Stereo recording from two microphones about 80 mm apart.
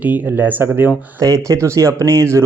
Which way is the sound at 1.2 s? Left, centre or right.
Right.